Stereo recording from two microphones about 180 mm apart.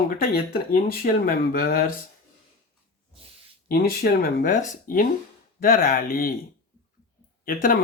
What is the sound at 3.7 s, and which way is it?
Speech, 60° left (ahead or behind).